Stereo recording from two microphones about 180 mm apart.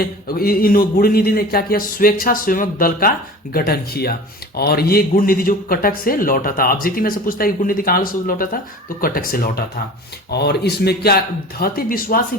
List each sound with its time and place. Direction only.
0.0 s speech: 55° left (ahead or behind)
10.3 s a man's voice: 65° left (ahead or behind)